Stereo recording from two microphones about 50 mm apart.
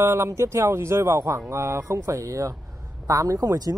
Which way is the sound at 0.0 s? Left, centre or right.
Right.